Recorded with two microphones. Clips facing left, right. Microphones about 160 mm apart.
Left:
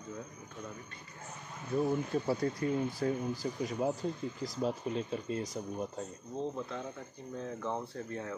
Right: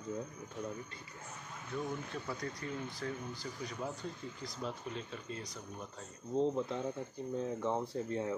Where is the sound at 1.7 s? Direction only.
35° left (ahead or behind).